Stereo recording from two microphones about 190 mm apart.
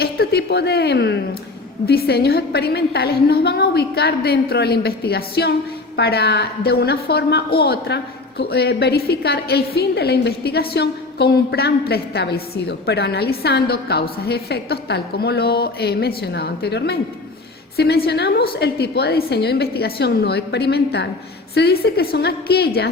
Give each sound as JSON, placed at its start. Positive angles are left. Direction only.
{"t": 0.0, "sound": "a woman's voice", "side_deg": 55}